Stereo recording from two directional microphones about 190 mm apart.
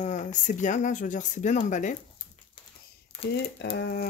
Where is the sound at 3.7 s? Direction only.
65° left (ahead or behind).